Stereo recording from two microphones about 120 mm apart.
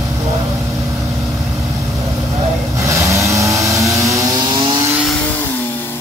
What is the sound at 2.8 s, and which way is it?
Vehicle, 25° right (ahead or behind).